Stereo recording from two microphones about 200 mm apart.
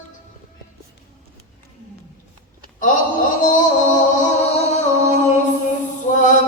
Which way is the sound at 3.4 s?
40° left (ahead or behind).